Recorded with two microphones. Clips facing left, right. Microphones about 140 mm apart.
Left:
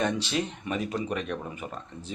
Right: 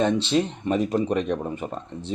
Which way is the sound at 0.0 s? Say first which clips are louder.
Right 7 dB; 25° right (ahead or behind).